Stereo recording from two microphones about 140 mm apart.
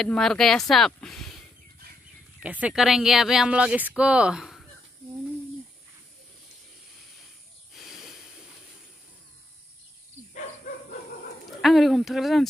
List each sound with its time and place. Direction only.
0.0 s speech: 5° left (ahead or behind)
2.4 s speech: 10° right (ahead or behind)
7.7 s a sound: centre (ahead or behind)
10.3 s dog: 70° left (ahead or behind)
11.6 s speech: centre (ahead or behind)